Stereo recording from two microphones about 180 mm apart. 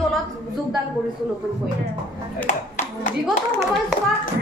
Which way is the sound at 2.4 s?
45° left (ahead or behind).